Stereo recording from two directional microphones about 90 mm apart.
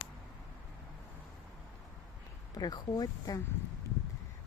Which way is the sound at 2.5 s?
45° left (ahead or behind).